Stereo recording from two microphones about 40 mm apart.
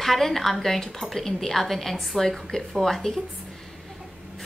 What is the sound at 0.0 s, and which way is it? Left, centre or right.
A woman's voice, centre.